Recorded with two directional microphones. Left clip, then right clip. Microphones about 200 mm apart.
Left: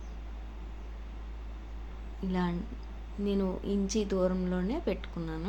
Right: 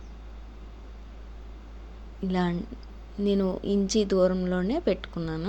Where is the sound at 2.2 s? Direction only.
25° right (ahead or behind).